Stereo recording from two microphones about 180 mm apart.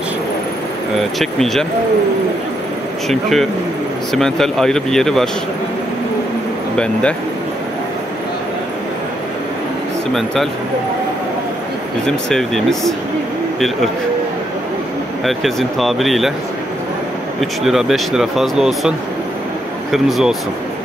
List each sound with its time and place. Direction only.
1.2 s speech: centre (ahead or behind)
3.1 s speech: centre (ahead or behind)
6.8 s speech: 5° left (ahead or behind)
10.1 s speech: centre (ahead or behind)
12.3 s speech: centre (ahead or behind)
15.2 s speech: centre (ahead or behind)
17.4 s speech: centre (ahead or behind)